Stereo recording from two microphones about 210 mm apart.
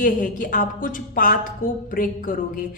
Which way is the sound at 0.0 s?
40° left (ahead or behind).